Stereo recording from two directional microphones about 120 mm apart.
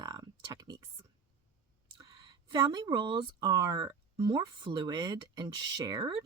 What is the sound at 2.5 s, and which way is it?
Speech, 40° right (ahead or behind).